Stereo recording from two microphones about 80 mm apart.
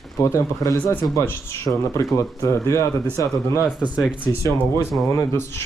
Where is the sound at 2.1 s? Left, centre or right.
Left.